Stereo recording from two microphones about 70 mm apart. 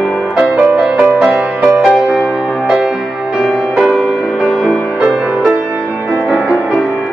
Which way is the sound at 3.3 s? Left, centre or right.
Centre.